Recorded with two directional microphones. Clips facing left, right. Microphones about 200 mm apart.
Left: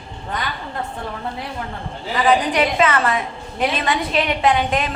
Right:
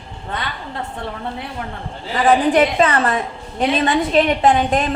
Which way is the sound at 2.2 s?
50° right (ahead or behind).